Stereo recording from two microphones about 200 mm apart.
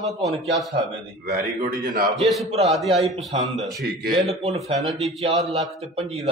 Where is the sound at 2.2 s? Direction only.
Centre (ahead or behind).